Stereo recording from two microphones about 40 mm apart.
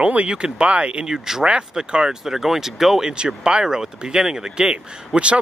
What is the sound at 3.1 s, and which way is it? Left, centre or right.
Speech, right.